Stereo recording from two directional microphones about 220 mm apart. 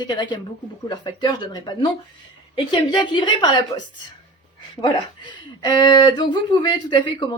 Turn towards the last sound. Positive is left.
turn(degrees=20)  # may be behind; listen again after turning